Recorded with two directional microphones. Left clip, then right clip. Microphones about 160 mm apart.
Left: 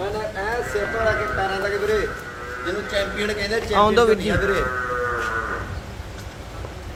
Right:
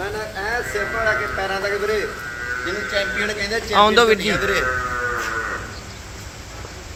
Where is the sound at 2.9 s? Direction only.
15° left (ahead or behind).